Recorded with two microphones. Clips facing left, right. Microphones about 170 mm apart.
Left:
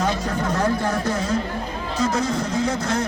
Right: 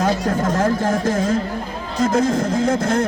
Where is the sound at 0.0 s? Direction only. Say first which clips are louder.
Right 4 dB; 45° right (ahead or behind).